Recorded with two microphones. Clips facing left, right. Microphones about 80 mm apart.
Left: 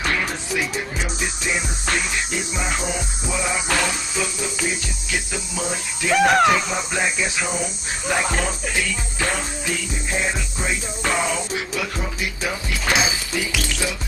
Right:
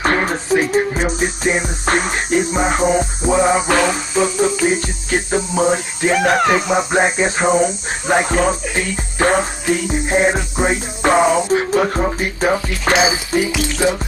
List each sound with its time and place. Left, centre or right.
0.0 s music: right
6.1 s speech: centre
6.5 s music: right